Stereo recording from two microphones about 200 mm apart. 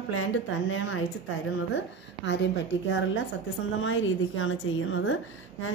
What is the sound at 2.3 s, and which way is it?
Speech, 65° left (ahead or behind).